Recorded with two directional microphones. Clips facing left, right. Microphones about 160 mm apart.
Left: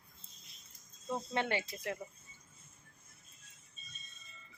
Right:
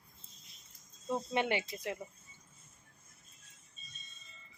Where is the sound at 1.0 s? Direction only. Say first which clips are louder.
Right 2 dB; 15° right (ahead or behind).